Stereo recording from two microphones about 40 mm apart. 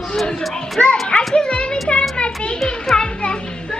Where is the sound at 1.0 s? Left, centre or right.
Left.